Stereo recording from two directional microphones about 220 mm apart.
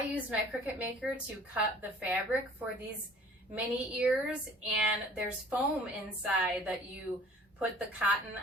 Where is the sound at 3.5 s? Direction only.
5° right (ahead or behind).